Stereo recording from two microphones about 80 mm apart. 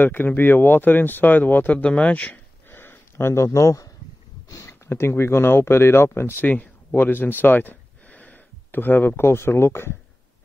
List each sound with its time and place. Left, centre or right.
0.0 s speech: left
2.7 s a sound: left
4.5 s speech: left